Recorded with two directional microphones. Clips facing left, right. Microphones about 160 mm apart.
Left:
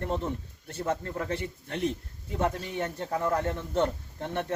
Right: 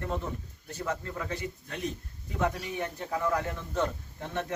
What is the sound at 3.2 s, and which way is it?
Speech, 30° left (ahead or behind).